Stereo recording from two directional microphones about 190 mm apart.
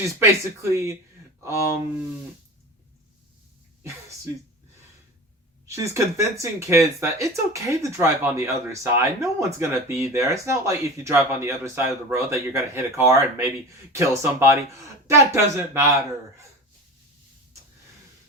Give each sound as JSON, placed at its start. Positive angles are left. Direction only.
{"t": 0.2, "sound": "speech", "side_deg": -15}
{"t": 5.6, "sound": "speech", "side_deg": -15}